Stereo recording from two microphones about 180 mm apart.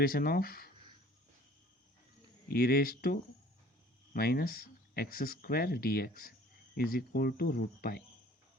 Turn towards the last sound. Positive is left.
turn(degrees=55)  # may be behind; listen again after turning